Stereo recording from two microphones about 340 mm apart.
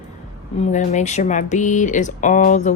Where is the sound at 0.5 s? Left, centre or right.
Centre.